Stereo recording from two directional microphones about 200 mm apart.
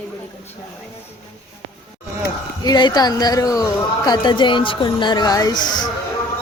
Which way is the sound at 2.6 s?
20° left (ahead or behind).